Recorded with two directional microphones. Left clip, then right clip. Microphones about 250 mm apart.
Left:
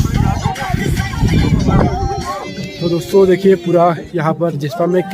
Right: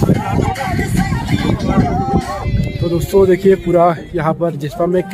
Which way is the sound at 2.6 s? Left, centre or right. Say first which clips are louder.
Left 1 dB; left.